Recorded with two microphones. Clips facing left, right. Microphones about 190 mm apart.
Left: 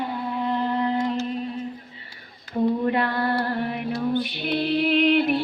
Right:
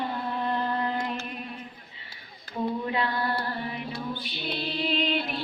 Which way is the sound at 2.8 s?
50° left (ahead or behind).